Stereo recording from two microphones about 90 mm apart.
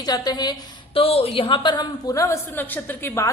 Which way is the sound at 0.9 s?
90° left.